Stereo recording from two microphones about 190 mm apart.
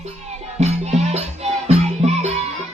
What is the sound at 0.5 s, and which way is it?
Music, 35° right (ahead or behind).